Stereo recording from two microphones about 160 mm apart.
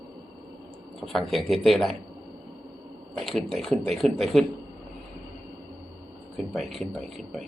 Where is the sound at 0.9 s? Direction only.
Centre (ahead or behind).